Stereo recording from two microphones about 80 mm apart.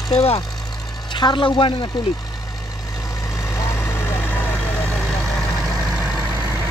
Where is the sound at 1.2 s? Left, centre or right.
Left.